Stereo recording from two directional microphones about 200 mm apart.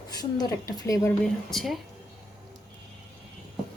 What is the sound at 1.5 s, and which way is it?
Speech, centre (ahead or behind).